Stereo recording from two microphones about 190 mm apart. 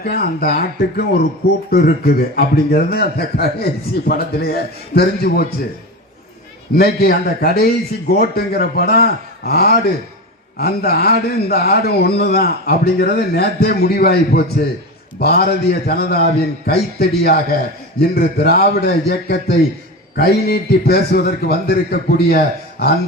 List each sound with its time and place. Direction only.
0.0 s a man's voice: 55° left (ahead or behind)
6.7 s a man's voice: 55° left (ahead or behind)